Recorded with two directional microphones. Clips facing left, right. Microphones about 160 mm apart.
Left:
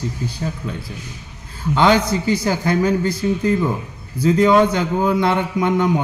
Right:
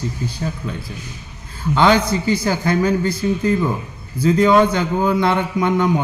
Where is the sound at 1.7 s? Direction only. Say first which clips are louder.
Even; 15° left (ahead or behind).